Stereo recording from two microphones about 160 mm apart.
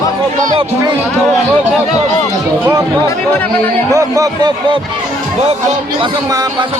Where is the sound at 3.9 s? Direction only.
20° right (ahead or behind).